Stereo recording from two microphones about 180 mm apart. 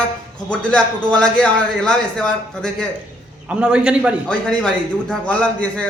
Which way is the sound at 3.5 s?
5° right (ahead or behind).